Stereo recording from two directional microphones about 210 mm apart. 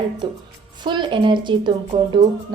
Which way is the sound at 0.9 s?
20° right (ahead or behind).